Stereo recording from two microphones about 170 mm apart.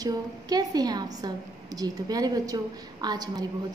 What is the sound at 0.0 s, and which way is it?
A woman's voice, 20° right (ahead or behind).